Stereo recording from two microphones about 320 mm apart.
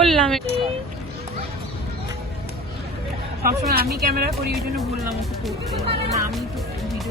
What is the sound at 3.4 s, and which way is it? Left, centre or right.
Speech, right.